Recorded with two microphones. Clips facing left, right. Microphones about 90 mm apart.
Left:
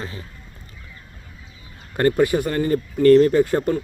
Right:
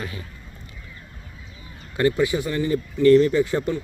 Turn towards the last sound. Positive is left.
turn(degrees=45)  # may be behind; listen again after turning